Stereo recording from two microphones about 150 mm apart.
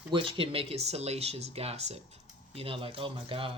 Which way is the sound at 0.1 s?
35° right (ahead or behind).